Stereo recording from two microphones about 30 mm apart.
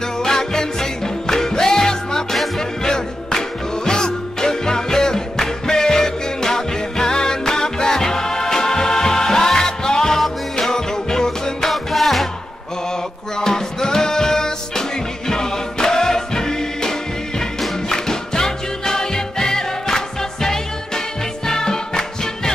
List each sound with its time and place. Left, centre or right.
0.2 s music: centre
11.7 s music: centre
13.4 s music: centre